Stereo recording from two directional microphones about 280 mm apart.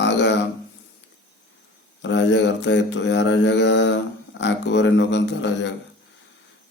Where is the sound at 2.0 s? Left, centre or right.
Left.